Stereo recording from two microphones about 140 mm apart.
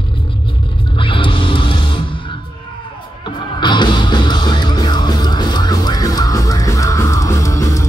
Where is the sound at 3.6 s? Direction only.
35° left (ahead or behind).